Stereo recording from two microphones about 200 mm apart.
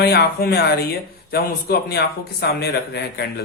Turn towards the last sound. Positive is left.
turn(degrees=55)  # may be behind; listen again after turning